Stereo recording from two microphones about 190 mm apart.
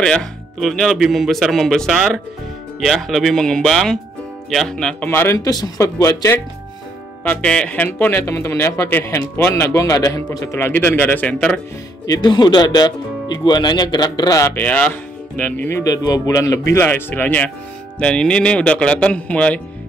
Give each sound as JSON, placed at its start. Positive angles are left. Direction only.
{"t": 0.0, "sound": "speech", "side_deg": 5}
{"t": 7.2, "sound": "speech", "side_deg": 5}
{"t": 12.1, "sound": "speech", "side_deg": 25}